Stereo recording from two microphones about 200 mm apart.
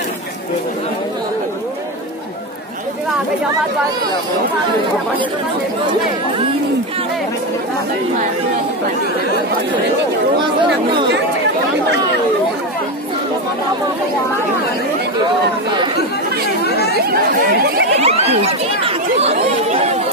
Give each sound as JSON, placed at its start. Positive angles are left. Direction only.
{"t": 16.6, "sound": "chatter", "side_deg": 55}
{"t": 16.9, "sound": "chatter", "side_deg": -50}
{"t": 17.9, "sound": "chatter", "side_deg": -30}